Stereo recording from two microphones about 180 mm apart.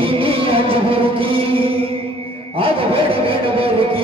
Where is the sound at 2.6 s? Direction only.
30° right (ahead or behind).